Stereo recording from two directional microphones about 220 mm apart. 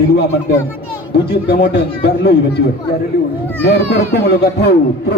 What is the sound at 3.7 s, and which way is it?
Speech, 45° left (ahead or behind).